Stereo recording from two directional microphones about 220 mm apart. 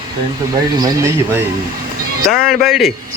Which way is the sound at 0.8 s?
15° right (ahead or behind).